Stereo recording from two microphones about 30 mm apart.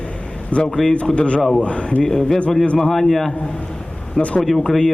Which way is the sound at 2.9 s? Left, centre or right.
Centre.